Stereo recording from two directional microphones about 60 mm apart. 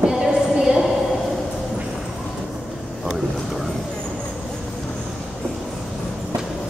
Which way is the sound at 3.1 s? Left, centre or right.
Centre.